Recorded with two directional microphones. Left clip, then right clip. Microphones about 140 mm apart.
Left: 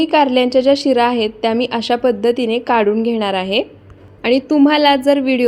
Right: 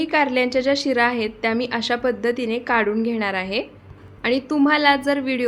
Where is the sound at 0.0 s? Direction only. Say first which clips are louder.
Left 6 dB; 15° left (ahead or behind).